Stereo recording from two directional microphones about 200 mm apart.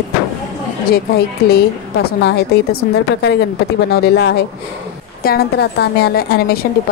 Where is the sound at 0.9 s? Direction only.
50° left (ahead or behind).